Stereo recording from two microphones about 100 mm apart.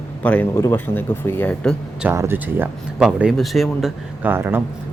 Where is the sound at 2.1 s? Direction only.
25° right (ahead or behind).